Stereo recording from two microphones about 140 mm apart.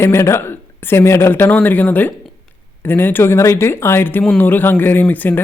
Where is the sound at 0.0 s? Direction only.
20° left (ahead or behind).